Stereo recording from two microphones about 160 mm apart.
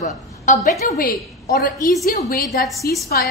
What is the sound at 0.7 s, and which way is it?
A woman's voice, 60° left (ahead or behind).